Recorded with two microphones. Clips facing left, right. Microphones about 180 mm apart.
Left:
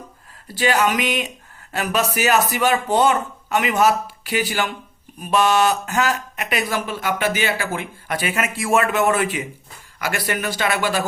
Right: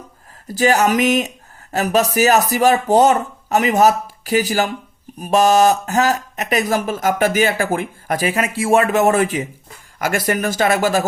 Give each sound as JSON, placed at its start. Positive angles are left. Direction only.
{"t": 0.4, "sound": "speech", "side_deg": -45}